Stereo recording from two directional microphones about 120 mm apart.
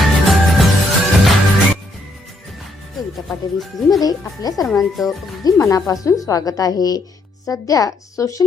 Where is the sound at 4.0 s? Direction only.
30° left (ahead or behind).